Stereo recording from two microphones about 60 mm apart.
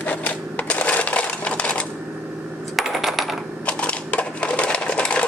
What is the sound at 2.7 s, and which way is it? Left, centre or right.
Coin, centre.